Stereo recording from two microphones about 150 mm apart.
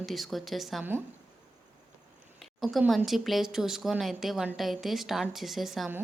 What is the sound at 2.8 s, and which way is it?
Speech, centre (ahead or behind).